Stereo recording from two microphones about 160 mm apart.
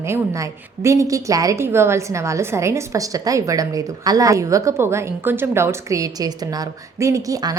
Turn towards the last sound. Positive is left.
turn(degrees=-20)  # may be behind; listen again after turning